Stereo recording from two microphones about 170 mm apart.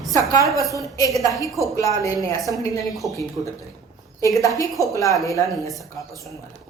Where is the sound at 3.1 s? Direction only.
20° left (ahead or behind).